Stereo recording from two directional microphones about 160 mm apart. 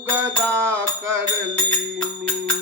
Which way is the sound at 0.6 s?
10° right (ahead or behind).